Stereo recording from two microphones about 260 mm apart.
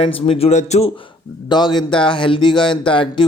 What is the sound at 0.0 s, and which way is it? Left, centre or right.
A man's voice, left.